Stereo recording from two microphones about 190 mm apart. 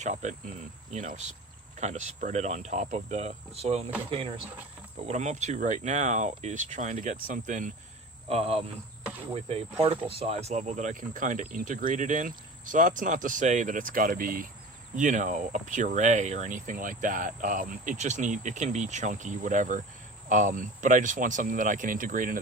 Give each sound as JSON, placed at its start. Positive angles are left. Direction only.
{"t": 0.0, "sound": "speech", "side_deg": -40}
{"t": 5.0, "sound": "speech", "side_deg": -35}
{"t": 8.3, "sound": "speech", "side_deg": -30}